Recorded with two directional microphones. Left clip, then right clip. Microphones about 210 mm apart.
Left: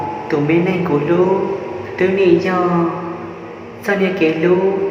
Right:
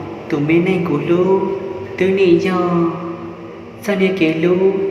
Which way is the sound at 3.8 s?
35° right (ahead or behind).